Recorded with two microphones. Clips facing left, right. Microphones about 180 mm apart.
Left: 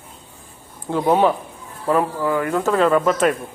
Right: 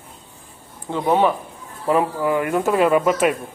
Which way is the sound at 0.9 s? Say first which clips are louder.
Left 1 dB; 5° left (ahead or behind).